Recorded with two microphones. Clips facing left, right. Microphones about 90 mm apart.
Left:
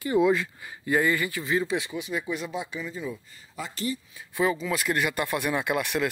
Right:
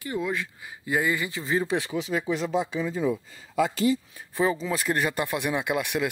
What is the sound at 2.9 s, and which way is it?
Speech, 75° right (ahead or behind).